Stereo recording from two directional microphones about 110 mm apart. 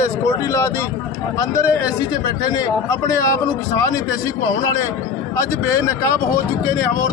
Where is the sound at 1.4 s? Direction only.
30° left (ahead or behind).